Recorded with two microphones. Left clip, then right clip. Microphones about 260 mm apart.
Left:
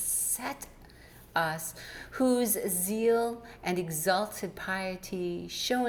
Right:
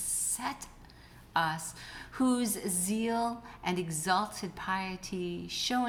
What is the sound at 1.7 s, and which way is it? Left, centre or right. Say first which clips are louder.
Speech: left 3 dB; centre.